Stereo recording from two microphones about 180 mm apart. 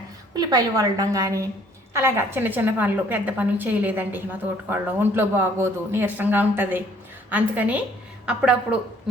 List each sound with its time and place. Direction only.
0.3 s a woman's voice: 20° right (ahead or behind)